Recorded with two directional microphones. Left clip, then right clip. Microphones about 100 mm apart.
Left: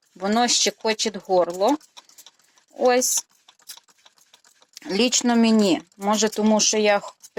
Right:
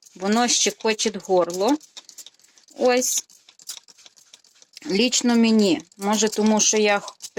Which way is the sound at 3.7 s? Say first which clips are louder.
Right 5 dB; 40° right (ahead or behind).